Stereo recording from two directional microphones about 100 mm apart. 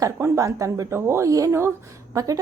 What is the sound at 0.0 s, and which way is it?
A woman's voice, 30° right (ahead or behind).